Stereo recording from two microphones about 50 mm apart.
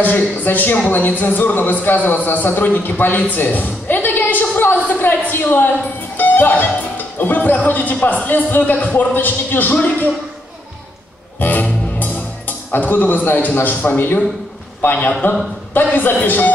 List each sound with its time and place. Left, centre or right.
0.0 s a man's voice: left
11.3 s music: left
13.6 s a man's voice: left
15.2 s a man's voice: left